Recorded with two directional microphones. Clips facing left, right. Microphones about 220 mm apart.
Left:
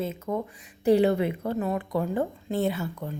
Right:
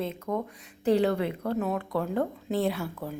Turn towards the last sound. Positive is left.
turn(degrees=0)  # may be behind; listen again after turning